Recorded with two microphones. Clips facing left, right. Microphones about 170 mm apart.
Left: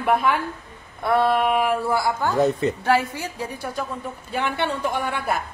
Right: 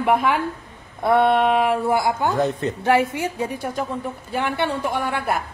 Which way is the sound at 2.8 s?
20° right (ahead or behind).